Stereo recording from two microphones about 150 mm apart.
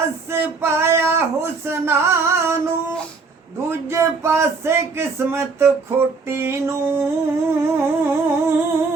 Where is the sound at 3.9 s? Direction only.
20° right (ahead or behind).